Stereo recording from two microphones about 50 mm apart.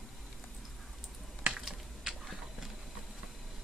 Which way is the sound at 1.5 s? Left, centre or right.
Centre.